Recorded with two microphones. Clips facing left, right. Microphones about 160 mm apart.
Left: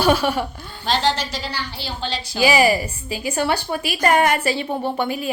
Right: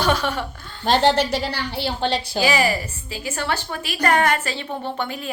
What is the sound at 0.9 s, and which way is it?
A woman's voice, 55° right (ahead or behind).